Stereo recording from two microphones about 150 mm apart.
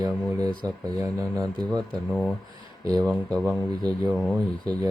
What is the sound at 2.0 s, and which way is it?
Speech, centre (ahead or behind).